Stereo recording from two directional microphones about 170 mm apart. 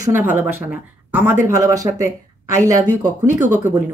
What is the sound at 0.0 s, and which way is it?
A woman's voice, 15° right (ahead or behind).